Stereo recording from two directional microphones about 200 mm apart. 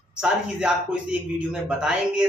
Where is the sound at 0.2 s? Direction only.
5° right (ahead or behind).